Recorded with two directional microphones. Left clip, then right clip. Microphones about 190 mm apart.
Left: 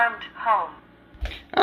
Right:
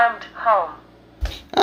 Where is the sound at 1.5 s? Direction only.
15° right (ahead or behind).